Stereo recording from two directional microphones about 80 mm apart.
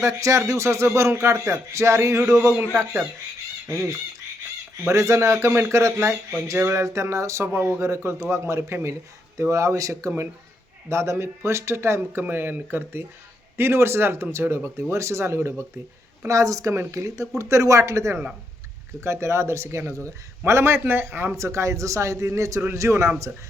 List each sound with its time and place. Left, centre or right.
0.0 s speech: right
3.7 s speech: right
21.3 s speech: right